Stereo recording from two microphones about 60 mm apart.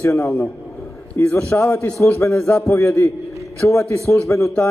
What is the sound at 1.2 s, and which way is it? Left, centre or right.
Speech, left.